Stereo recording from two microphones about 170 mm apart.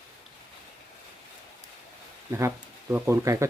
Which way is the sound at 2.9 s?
15° right (ahead or behind).